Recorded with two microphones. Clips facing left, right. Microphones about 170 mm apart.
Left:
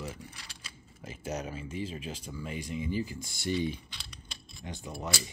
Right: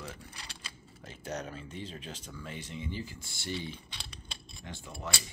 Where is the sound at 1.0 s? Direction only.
10° left (ahead or behind).